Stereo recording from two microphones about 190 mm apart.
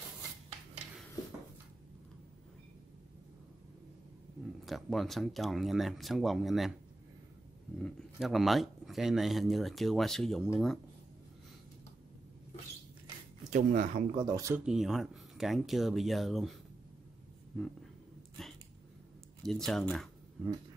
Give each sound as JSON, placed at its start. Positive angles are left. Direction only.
{"t": 4.6, "sound": "speech", "side_deg": 0}
{"t": 7.8, "sound": "speech", "side_deg": 0}
{"t": 13.5, "sound": "speech", "side_deg": -40}
{"t": 14.1, "sound": "speech", "side_deg": -20}
{"t": 14.6, "sound": "speech", "side_deg": 0}
{"t": 17.5, "sound": "a sound", "side_deg": 0}
{"t": 19.4, "sound": "speech", "side_deg": 0}